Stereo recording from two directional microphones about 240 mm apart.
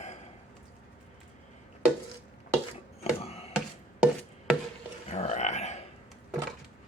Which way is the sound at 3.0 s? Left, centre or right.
Left.